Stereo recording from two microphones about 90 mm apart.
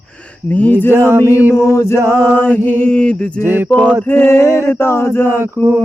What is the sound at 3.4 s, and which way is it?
Chant, 25° right (ahead or behind).